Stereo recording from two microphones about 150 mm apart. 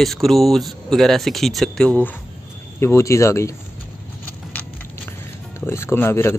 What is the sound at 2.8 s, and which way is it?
Speech, 20° left (ahead or behind).